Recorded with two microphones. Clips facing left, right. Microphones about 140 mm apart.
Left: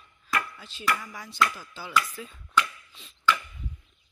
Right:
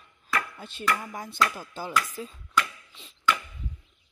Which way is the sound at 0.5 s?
55° right (ahead or behind).